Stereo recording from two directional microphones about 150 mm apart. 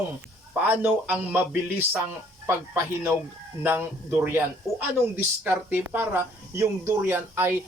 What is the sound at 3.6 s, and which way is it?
Speech, 15° right (ahead or behind).